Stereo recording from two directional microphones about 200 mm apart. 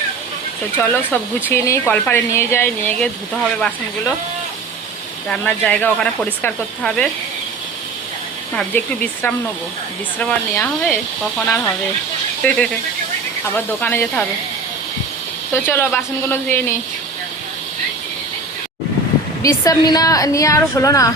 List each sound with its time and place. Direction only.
0.8 s a woman's voice: 10° left (ahead or behind)
5.3 s speech: 5° left (ahead or behind)
8.7 s a woman's voice: 10° left (ahead or behind)
10.2 s speech: 5° left (ahead or behind)
12.4 s a woman's voice: 10° left (ahead or behind)
15.5 s a woman's voice: 10° left (ahead or behind)
19.4 s a woman's voice: 15° left (ahead or behind)